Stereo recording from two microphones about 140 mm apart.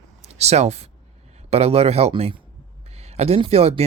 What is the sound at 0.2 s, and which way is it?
Speech, 50° right (ahead or behind).